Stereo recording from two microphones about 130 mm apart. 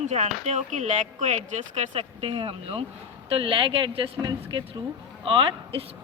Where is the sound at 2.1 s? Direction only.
45° right (ahead or behind).